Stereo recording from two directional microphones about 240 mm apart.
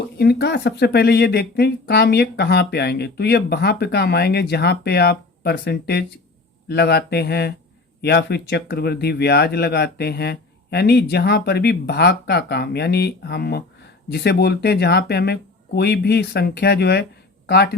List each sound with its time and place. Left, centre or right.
0.2 s speech: left